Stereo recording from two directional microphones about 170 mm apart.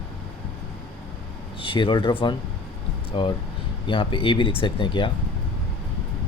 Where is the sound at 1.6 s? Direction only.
30° left (ahead or behind).